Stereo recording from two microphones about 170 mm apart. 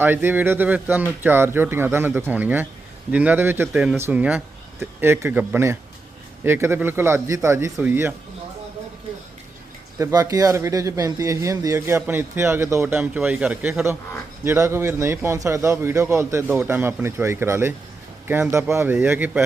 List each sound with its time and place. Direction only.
0.0 s a man's voice: 10° right (ahead or behind)
10.0 s a man's voice: 20° right (ahead or behind)